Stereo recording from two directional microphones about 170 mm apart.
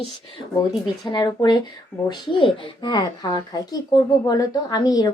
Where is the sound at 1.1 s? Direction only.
25° left (ahead or behind).